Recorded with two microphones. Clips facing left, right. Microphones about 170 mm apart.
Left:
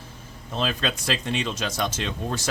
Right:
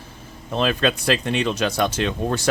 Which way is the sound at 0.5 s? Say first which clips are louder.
Right 6 dB; 65° right (ahead or behind).